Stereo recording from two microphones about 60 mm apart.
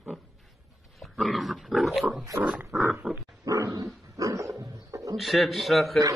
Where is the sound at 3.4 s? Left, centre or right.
Right.